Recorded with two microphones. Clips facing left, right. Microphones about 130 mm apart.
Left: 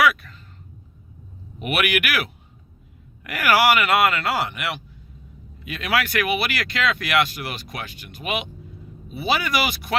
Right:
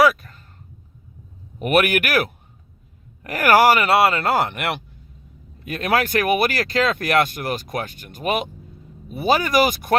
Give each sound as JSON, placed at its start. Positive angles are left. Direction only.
{"t": 0.0, "sound": "a sound", "side_deg": -40}
{"t": 1.5, "sound": "speech", "side_deg": -45}
{"t": 4.3, "sound": "speech", "side_deg": -50}